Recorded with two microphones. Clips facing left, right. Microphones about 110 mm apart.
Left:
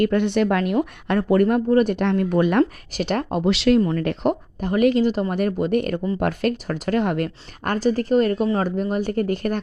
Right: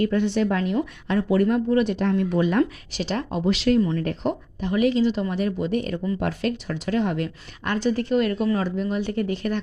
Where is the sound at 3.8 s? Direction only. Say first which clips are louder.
Left 2 dB; 50° left (ahead or behind).